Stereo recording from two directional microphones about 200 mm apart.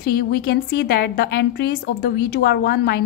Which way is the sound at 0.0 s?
50° left (ahead or behind).